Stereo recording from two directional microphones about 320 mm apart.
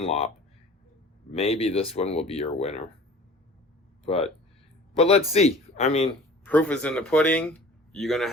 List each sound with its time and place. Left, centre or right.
0.0 s speech: centre
1.3 s speech: centre
4.0 s speech: centre
6.4 s speech: centre